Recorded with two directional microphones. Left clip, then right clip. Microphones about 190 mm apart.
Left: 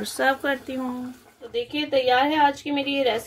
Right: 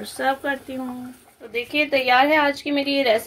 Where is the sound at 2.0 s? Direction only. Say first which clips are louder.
Right 2 dB; 30° right (ahead or behind).